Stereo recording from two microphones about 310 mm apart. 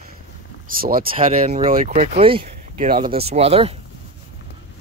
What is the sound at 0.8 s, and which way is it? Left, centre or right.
Speech, right.